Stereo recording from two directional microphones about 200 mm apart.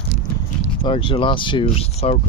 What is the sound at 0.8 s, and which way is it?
Speech, 25° left (ahead or behind).